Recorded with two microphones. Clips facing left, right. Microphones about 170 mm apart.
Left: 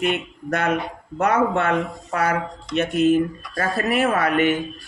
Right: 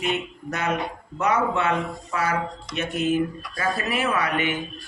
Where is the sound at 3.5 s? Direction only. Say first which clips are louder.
Left 4 dB; 50° left (ahead or behind).